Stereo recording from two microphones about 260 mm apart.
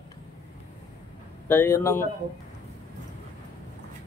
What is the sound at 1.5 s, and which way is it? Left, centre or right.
Speech, centre.